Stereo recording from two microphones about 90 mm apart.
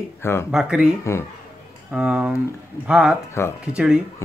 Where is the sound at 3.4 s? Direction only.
30° left (ahead or behind).